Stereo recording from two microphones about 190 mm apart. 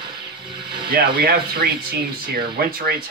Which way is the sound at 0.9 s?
55° right (ahead or behind).